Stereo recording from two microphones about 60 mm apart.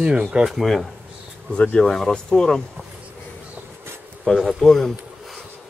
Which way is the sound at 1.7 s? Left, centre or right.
Centre.